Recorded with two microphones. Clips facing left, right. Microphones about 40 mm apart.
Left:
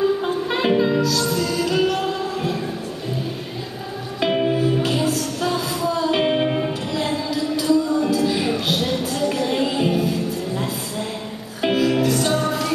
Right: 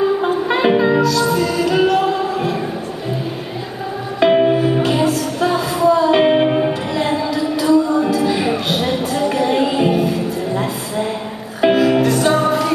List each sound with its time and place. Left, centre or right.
0.0 s music: centre
4.2 s music: centre
5.0 s music: centre
5.4 s music: centre